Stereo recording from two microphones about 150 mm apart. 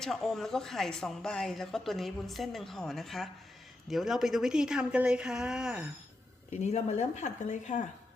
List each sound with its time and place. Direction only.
0.0 s a woman's voice: 5° left (ahead or behind)
6.5 s speech: 50° left (ahead or behind)